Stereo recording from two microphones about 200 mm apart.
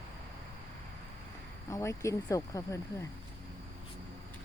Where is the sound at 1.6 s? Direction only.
15° left (ahead or behind).